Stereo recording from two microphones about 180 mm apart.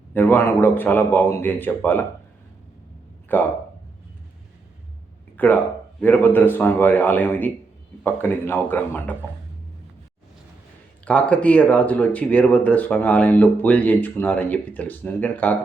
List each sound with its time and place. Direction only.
0.1 s speech: 10° left (ahead or behind)
3.3 s speech: 10° left (ahead or behind)
5.4 s speech: 10° left (ahead or behind)
11.0 s speech: 5° left (ahead or behind)